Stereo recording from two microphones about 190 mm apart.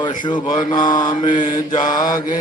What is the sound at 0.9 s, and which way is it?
Mantra, 45° left (ahead or behind).